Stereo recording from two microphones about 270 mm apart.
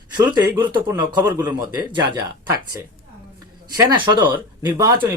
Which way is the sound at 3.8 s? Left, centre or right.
Centre.